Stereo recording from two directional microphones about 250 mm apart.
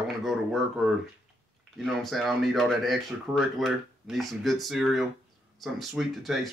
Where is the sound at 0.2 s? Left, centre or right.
Centre.